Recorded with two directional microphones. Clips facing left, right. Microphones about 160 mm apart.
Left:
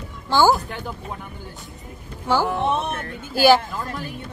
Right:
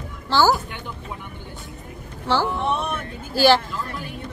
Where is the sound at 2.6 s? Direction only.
25° left (ahead or behind).